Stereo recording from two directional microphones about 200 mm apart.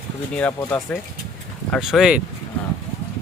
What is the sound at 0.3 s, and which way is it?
Speech, 5° left (ahead or behind).